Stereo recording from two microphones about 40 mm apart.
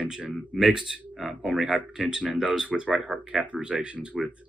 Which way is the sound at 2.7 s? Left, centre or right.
Right.